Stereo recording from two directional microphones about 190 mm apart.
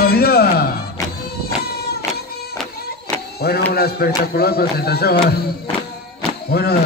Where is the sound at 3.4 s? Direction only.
55° left (ahead or behind).